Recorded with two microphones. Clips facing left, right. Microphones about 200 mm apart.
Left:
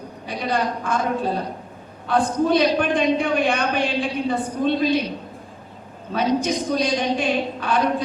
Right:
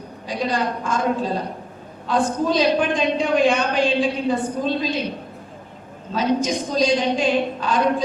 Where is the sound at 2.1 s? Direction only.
60° left (ahead or behind).